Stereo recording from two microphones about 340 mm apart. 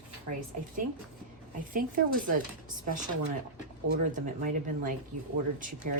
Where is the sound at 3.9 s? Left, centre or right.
Right.